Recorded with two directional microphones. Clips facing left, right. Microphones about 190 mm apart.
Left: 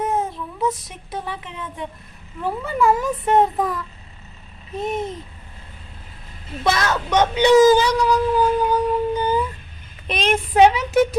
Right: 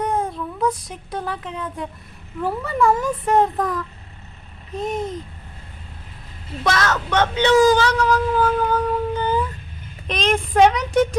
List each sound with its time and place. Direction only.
0.0 s a child's voice: 5° left (ahead or behind)
4.8 s a child's voice: centre (ahead or behind)
6.7 s speech: 10° left (ahead or behind)